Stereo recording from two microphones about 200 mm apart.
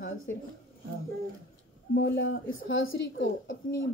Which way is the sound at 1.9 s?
55° left (ahead or behind).